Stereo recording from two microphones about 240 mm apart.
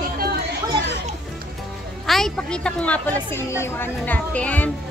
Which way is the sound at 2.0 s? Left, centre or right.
Centre.